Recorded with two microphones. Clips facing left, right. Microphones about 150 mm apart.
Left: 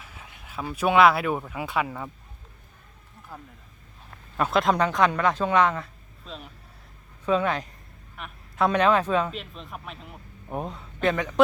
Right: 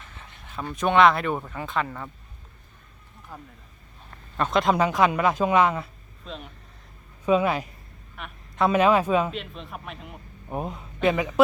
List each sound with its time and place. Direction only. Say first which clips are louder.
0.0 s speech: even; 5° left (ahead or behind)
4.1 s speech: even; 5° left (ahead or behind)
7.3 s a man's voice: right 2 dB; 10° right (ahead or behind)